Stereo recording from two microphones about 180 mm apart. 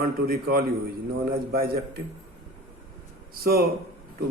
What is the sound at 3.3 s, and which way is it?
Speech, 55° right (ahead or behind).